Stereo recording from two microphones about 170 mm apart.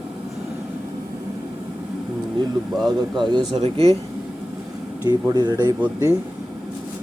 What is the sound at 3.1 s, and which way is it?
Speech, 25° right (ahead or behind).